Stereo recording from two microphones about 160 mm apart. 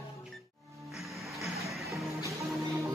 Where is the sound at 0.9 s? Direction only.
Centre (ahead or behind).